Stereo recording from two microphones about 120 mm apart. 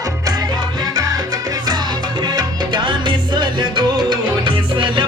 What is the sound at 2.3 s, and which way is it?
Music, 40° right (ahead or behind).